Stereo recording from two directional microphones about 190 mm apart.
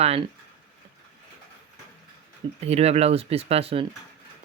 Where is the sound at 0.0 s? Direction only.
30° right (ahead or behind).